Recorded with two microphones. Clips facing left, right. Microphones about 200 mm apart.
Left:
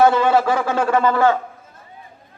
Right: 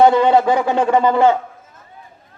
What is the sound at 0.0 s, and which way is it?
A man's voice, 20° right (ahead or behind).